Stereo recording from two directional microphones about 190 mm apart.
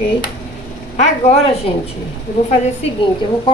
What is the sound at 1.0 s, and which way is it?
Speech, 35° left (ahead or behind).